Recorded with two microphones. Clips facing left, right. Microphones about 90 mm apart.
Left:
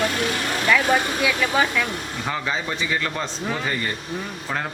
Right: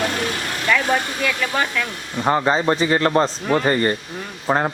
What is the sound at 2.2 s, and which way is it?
A man's voice, 45° right (ahead or behind).